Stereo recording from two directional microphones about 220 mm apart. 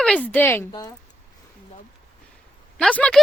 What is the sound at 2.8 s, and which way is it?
Speech, 5° left (ahead or behind).